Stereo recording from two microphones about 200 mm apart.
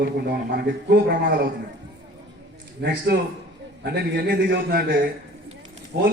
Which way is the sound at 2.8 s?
55° right (ahead or behind).